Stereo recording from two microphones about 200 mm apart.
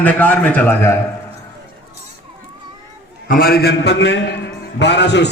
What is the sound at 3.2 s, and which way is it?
A man's voice, 45° left (ahead or behind).